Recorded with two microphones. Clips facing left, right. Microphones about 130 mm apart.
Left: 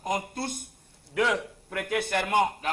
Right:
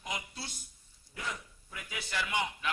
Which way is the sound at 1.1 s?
80° left.